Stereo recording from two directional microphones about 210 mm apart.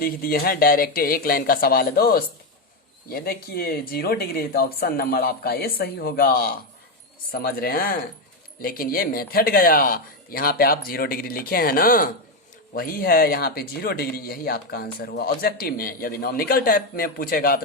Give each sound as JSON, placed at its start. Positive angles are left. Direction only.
{"t": 0.0, "sound": "speech", "side_deg": 45}